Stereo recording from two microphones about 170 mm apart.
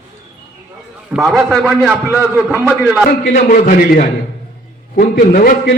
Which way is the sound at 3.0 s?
50° left (ahead or behind).